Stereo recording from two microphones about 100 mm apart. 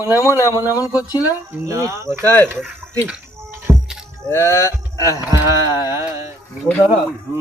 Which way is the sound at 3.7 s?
20° right (ahead or behind).